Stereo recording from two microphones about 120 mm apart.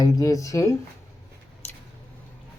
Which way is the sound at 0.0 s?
30° left (ahead or behind).